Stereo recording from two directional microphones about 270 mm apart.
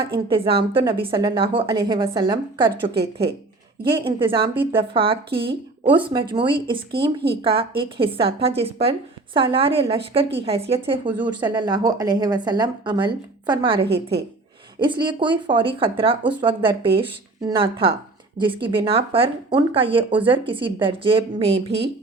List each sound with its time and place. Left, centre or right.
0.3 s a woman's voice: centre